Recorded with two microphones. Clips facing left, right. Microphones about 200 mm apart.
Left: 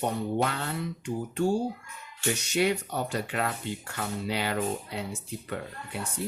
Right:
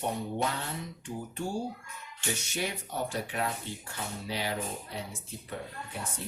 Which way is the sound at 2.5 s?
70° left (ahead or behind).